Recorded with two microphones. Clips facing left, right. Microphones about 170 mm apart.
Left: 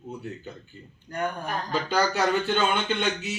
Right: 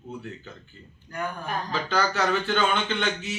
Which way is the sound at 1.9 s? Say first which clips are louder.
Left 1 dB; 15° left (ahead or behind).